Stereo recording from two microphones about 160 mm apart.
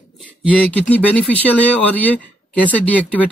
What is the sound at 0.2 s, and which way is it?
Speech, 10° left (ahead or behind).